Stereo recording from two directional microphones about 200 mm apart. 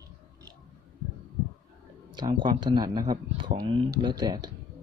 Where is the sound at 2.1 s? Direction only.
20° right (ahead or behind).